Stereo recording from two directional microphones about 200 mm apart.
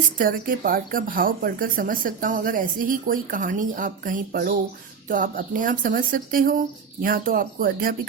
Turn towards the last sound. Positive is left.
turn(degrees=-45)  # may be behind; listen again after turning